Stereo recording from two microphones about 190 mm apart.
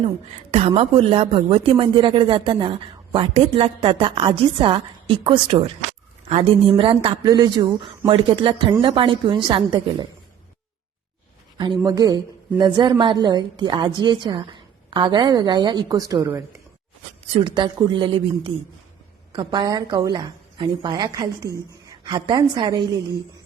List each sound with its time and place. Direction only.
0.7 s a woman's voice: 30° right (ahead or behind)
11.5 s a woman's voice: 25° right (ahead or behind)